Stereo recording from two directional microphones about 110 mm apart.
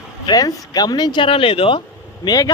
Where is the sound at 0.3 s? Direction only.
35° left (ahead or behind); by 1.8 s 55° left (ahead or behind).